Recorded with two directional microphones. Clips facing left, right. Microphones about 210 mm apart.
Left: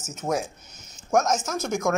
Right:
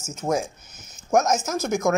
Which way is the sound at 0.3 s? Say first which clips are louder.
Right 2 dB; 5° right (ahead or behind).